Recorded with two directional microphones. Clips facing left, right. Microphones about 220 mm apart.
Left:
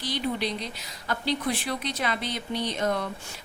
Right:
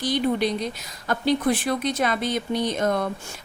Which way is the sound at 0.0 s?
45° right (ahead or behind).